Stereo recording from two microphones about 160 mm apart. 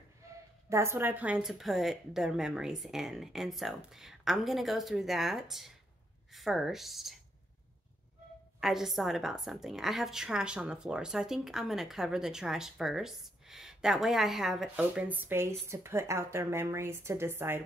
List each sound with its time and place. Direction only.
0.7 s a woman's voice: 15° right (ahead or behind)
8.5 s a woman's voice: centre (ahead or behind)